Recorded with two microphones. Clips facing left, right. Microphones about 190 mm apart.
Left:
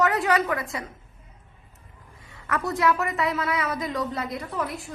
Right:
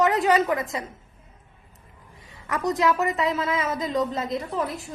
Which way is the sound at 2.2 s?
15° right (ahead or behind).